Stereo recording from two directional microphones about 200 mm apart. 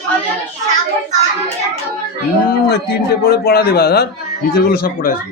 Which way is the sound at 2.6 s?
55° left (ahead or behind).